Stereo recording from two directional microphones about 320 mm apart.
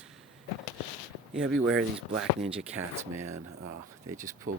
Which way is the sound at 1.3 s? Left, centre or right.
Centre.